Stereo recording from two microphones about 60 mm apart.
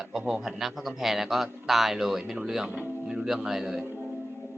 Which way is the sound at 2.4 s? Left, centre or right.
Centre.